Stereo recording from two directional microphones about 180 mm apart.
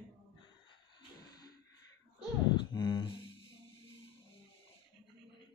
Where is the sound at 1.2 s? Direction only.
20° left (ahead or behind).